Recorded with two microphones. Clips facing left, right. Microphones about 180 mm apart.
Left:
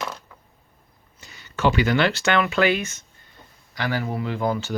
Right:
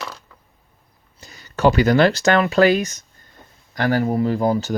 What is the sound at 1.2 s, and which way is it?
Speech, 40° right (ahead or behind).